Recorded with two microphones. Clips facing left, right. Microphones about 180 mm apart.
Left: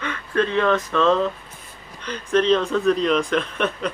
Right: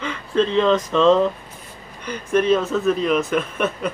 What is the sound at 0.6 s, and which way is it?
Speech, 20° right (ahead or behind).